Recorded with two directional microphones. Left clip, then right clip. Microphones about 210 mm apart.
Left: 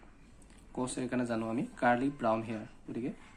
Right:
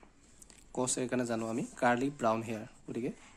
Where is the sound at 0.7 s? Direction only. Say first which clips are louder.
Right 2 dB; 40° right (ahead or behind).